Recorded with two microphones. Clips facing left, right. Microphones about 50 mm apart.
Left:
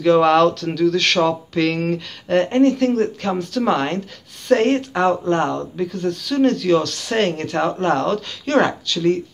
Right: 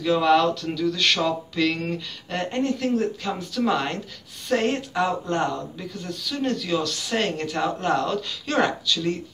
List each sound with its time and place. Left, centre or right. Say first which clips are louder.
0.0 s speech: left 6 dB; left
1.2 s speech: left 5 dB; left
3.6 s speech: left 3 dB; left